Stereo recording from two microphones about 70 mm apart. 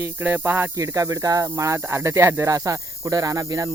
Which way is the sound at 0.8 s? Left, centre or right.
Right.